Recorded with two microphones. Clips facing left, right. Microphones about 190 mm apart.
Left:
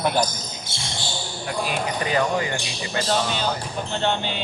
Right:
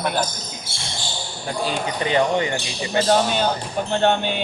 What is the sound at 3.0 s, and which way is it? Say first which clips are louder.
Speech: right 5 dB; 55° right (ahead or behind).